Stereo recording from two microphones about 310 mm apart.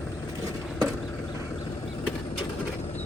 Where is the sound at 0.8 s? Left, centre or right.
Centre.